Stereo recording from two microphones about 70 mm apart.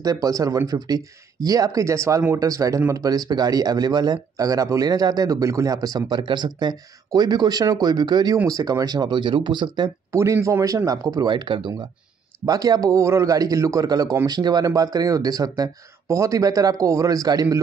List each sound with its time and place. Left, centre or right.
0.0 s speech: right
0.7 s speech: right
7.6 s speech: right
8.5 s speech: right
10.1 s speech: right
10.9 s speech: right
12.4 s speech: right
16.1 s speech: right